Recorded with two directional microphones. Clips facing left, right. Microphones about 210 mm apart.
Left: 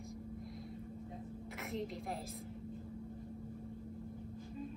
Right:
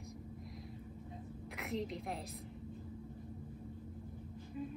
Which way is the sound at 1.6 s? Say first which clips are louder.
Right 2 dB; centre (ahead or behind).